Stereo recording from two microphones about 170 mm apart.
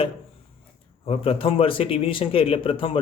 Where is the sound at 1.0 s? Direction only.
35° left (ahead or behind).